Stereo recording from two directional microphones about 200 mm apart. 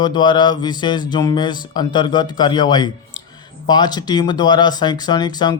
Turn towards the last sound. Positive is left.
turn(degrees=20)  # may be behind; listen again after turning